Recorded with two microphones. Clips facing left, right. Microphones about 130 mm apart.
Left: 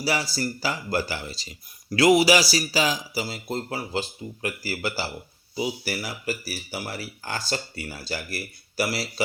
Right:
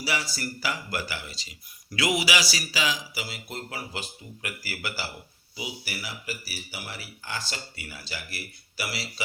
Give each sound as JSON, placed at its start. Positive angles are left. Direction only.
{"t": 0.0, "sound": "speech", "side_deg": 35}